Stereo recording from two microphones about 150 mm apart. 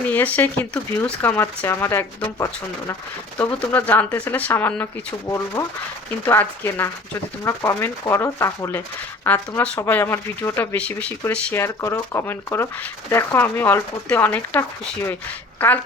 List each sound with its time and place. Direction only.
0.1 s speech: 10° left (ahead or behind)